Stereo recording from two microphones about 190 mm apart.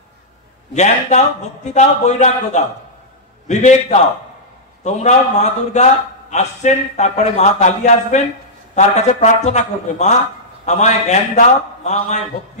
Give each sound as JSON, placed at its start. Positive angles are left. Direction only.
{"t": 0.7, "sound": "a man's voice", "side_deg": 35}